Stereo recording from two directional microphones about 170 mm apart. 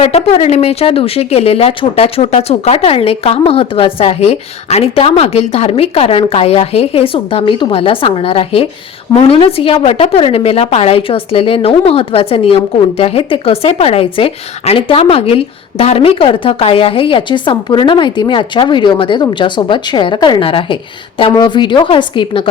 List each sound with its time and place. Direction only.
0.0 s a woman's voice: 35° left (ahead or behind)